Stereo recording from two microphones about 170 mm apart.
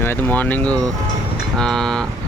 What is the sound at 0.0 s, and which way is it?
Speech, 10° left (ahead or behind).